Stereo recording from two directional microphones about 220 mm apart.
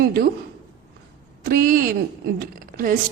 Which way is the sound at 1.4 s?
40° right (ahead or behind).